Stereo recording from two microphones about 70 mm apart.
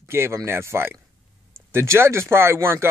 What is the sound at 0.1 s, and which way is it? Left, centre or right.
Speech, right.